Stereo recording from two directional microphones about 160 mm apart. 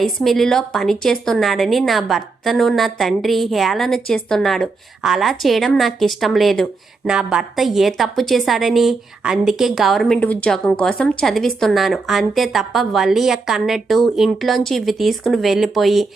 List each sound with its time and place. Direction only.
0.0 s a woman's voice: centre (ahead or behind)